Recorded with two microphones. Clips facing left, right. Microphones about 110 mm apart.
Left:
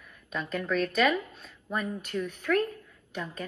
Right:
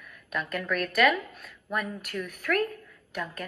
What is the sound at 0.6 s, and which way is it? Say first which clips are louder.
A woman's voice: right 1 dB; 30° left (ahead or behind).